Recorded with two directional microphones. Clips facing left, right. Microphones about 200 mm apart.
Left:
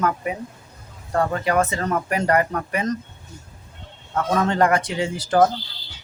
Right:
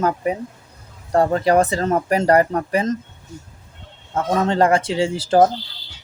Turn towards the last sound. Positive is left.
turn(degrees=-25)  # may be behind; listen again after turning